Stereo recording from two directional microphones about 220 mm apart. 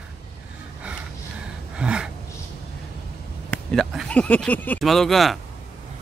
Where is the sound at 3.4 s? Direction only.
5° left (ahead or behind).